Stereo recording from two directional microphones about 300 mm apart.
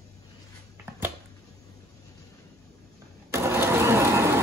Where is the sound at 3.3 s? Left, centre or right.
Centre.